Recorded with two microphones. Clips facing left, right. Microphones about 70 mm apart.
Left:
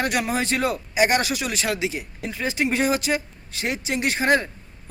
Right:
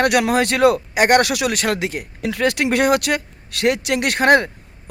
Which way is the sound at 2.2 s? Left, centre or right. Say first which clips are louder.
Right 6 dB; right.